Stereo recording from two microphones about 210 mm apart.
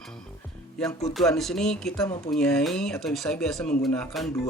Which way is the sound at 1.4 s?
Centre (ahead or behind).